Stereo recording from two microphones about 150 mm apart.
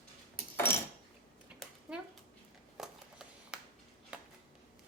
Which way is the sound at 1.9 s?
5° right (ahead or behind).